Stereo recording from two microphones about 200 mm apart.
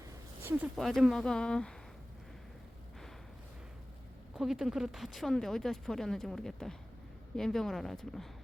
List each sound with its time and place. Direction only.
0.0 s speech: 10° right (ahead or behind)
4.4 s speech: centre (ahead or behind)